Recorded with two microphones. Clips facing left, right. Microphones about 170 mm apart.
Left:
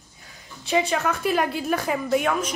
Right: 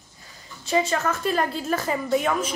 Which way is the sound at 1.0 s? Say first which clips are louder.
Left 1 dB; 5° left (ahead or behind).